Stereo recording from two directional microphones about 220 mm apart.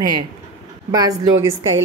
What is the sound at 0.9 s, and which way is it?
Speech, 15° right (ahead or behind).